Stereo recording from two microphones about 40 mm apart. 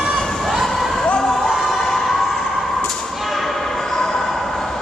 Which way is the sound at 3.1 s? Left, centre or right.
Centre.